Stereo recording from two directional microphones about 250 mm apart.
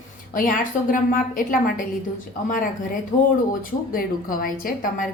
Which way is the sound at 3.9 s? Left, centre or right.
Left.